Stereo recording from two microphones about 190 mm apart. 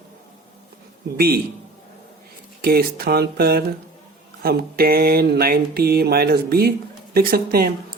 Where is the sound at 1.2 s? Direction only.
55° right (ahead or behind).